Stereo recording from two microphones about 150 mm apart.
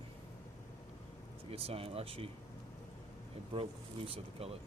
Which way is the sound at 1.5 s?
40° right (ahead or behind).